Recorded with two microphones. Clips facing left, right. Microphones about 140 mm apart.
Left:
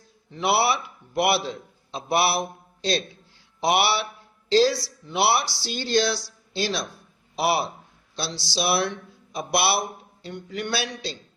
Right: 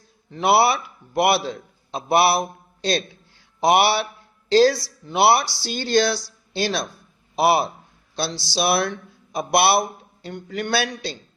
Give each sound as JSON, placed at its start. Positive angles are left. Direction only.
{"t": 0.3, "sound": "a man's voice", "side_deg": -45}